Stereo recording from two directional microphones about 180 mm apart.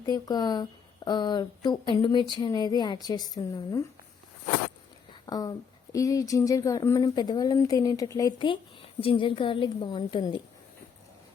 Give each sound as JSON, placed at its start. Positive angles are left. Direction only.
{"t": 0.0, "sound": "speech", "side_deg": 20}
{"t": 5.2, "sound": "speech", "side_deg": 20}